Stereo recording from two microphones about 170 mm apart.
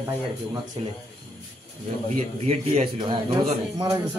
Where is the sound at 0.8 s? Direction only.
35° right (ahead or behind).